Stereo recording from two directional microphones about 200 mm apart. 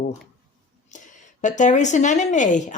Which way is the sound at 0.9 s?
40° left (ahead or behind).